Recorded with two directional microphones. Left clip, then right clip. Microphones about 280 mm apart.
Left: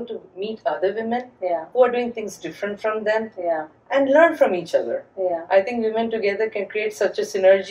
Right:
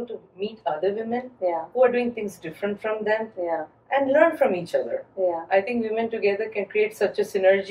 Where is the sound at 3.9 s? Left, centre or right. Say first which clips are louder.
Left 3 dB; centre.